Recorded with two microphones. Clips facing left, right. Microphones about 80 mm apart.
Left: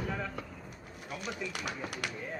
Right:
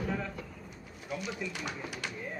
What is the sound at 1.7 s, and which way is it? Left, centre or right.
Speech, left.